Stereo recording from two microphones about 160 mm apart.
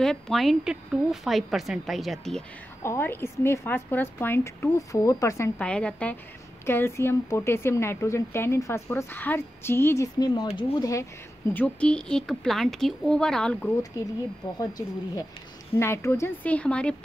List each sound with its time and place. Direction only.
0.0 s a woman's voice: centre (ahead or behind)
2.8 s speech: 15° left (ahead or behind)
5.6 s speech: 5° left (ahead or behind)
10.1 s speech: 25° left (ahead or behind)
11.5 s a woman's voice: 10° left (ahead or behind)
14.0 s speech: 20° left (ahead or behind)